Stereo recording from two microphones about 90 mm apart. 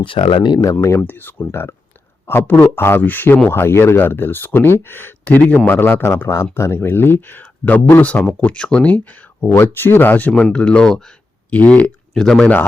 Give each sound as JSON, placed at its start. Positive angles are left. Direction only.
{"t": 0.0, "sound": "speech", "side_deg": 80}
{"t": 0.5, "sound": "speech", "side_deg": 40}
{"t": 0.9, "sound": "speech", "side_deg": 20}